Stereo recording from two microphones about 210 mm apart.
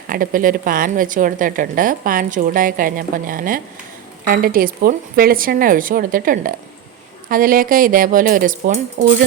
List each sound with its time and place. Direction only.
0.1 s a woman's voice: 40° right (ahead or behind)